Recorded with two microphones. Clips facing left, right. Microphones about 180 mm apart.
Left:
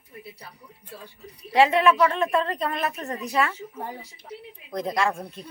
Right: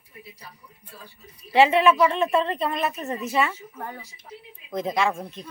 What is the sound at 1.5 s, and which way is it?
A woman's voice, centre (ahead or behind).